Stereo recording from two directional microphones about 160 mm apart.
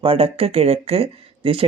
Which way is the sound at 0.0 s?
35° right (ahead or behind).